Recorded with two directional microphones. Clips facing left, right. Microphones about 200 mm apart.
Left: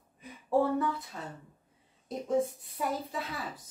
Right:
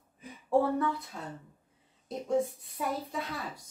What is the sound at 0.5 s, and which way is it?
Speech, centre (ahead or behind).